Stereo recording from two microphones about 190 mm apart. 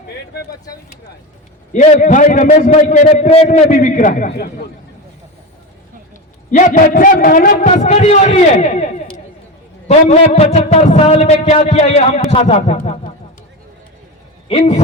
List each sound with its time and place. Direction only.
1.7 s a man's voice: 40° left (ahead or behind)
6.5 s a man's voice: 40° left (ahead or behind)
14.5 s a man's voice: 35° left (ahead or behind)